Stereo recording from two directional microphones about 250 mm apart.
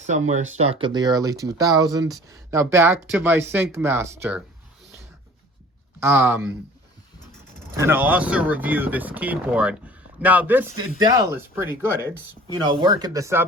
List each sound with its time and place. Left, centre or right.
0.3 s speech: right; by 4.4 s centre
6.0 s speech: centre
7.8 s speech: centre